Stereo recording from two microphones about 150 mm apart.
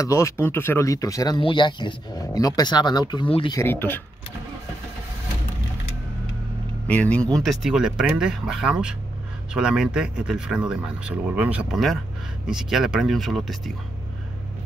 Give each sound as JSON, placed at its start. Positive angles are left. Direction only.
{"t": 0.0, "sound": "speech", "side_deg": 20}
{"t": 3.5, "sound": "speech", "side_deg": 15}
{"t": 6.9, "sound": "speech", "side_deg": 10}
{"t": 7.4, "sound": "speech", "side_deg": -5}